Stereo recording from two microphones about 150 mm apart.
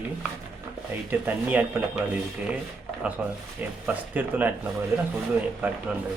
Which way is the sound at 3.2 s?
10° right (ahead or behind).